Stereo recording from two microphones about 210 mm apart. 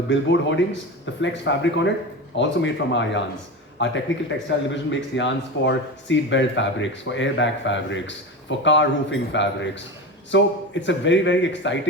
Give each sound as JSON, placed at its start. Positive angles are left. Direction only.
{"t": 0.1, "sound": "a man's voice", "side_deg": 60}